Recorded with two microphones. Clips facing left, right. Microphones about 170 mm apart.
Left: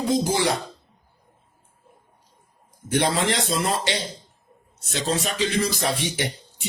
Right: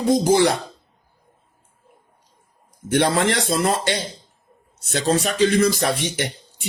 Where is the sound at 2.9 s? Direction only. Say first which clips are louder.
Right 4 dB; 60° right (ahead or behind).